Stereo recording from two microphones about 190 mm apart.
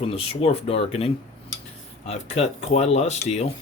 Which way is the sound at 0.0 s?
30° left (ahead or behind).